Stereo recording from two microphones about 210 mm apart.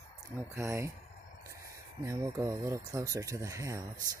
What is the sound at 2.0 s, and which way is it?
Speech, 15° right (ahead or behind).